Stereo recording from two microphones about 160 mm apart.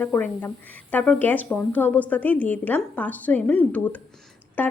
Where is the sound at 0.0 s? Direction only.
10° left (ahead or behind).